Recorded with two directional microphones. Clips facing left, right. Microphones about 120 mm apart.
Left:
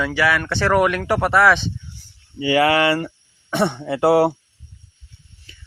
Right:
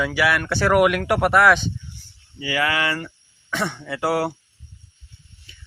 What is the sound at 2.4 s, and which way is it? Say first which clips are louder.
Speech: left 7 dB; 30° left (ahead or behind).